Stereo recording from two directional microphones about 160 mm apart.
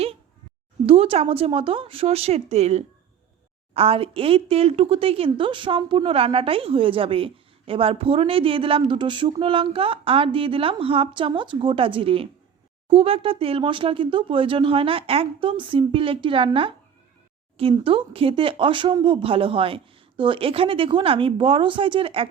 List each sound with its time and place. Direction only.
0.9 s a woman's voice: 35° right (ahead or behind)